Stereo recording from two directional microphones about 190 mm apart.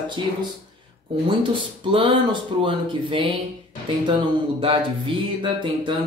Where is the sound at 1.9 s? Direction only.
25° right (ahead or behind).